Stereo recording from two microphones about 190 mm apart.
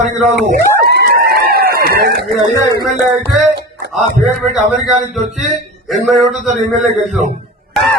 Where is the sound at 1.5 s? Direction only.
55° right (ahead or behind).